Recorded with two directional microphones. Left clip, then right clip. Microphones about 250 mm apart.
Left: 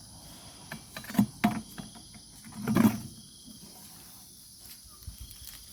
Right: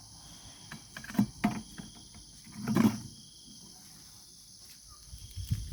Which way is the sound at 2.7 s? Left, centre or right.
Centre.